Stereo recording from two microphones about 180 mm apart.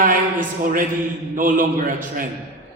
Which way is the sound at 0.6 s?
50° right (ahead or behind).